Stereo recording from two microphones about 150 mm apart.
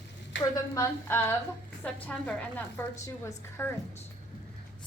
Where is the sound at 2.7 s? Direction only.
20° left (ahead or behind).